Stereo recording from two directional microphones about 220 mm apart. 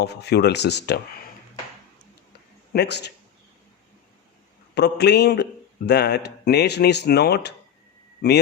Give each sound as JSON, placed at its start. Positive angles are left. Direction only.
{"t": 0.0, "sound": "a man's voice", "side_deg": 50}
{"t": 2.7, "sound": "a man's voice", "side_deg": 50}
{"t": 4.7, "sound": "a man's voice", "side_deg": 50}